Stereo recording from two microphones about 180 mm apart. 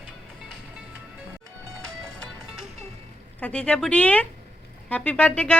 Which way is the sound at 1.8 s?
5° left (ahead or behind).